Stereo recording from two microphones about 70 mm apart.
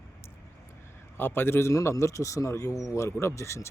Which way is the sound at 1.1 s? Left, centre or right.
Left.